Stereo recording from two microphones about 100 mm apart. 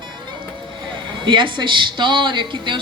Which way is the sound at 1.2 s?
55° right (ahead or behind).